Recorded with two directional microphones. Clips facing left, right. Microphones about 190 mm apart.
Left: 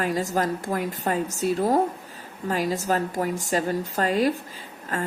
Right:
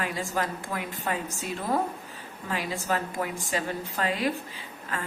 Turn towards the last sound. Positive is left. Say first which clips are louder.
# left 5 dB
turn(degrees=45)  # may be behind; listen again after turning